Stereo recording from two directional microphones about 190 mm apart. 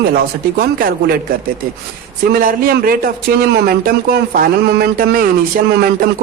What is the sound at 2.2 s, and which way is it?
Speech, 50° right (ahead or behind).